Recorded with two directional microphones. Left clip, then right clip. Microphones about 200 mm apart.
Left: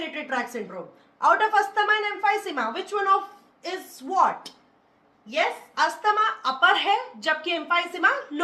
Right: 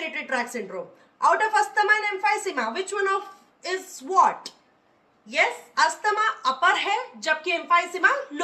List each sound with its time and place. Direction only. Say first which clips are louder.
0.1 s a woman's voice: right 1 dB; 15° left (ahead or behind)